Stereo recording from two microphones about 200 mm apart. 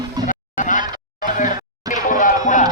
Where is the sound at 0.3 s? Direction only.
40° left (ahead or behind).